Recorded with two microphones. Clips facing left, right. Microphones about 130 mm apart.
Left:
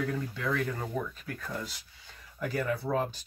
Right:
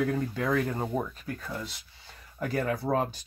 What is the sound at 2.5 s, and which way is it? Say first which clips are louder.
Speech: right 3 dB; 50° right (ahead or behind).